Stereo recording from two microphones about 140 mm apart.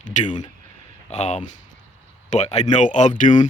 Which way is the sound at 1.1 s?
50° left (ahead or behind).